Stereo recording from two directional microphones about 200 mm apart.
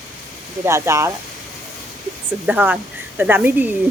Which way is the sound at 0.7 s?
15° right (ahead or behind).